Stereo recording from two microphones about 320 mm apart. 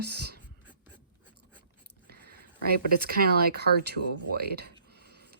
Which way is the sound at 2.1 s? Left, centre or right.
Right.